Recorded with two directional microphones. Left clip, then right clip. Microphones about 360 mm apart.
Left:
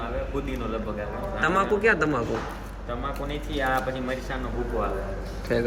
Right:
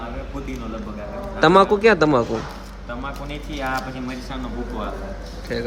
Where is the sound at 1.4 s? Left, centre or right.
Centre.